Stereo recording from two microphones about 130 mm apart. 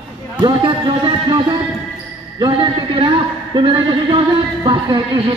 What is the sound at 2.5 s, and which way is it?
A man's voice, 40° right (ahead or behind).